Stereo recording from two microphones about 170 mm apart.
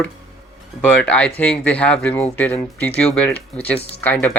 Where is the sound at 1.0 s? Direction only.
5° left (ahead or behind).